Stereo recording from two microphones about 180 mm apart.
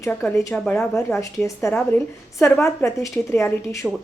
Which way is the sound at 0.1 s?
5° left (ahead or behind).